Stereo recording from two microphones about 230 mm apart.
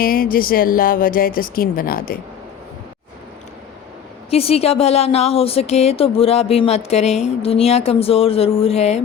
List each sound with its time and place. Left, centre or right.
0.0 s speech: left
4.3 s a woman's voice: left